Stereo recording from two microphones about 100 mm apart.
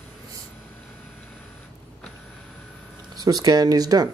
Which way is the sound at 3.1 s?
40° right (ahead or behind).